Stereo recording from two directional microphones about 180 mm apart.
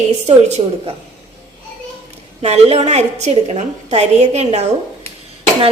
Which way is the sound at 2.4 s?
35° right (ahead or behind).